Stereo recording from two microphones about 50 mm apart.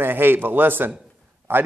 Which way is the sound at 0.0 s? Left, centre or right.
Right.